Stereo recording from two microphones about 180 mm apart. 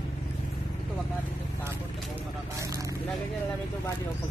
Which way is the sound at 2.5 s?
20° right (ahead or behind).